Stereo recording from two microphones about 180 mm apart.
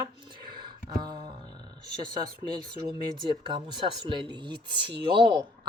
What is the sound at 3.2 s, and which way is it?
Speech, 25° right (ahead or behind).